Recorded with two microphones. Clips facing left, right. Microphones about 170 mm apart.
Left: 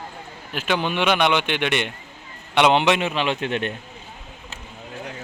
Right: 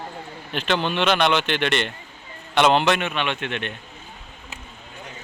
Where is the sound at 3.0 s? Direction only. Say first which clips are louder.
Left 3 dB; 30° left (ahead or behind).